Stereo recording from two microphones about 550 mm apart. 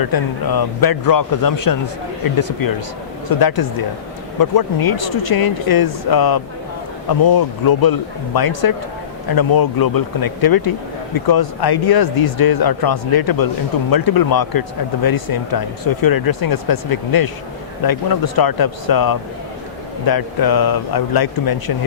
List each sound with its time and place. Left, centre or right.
0.0 s a man's voice: left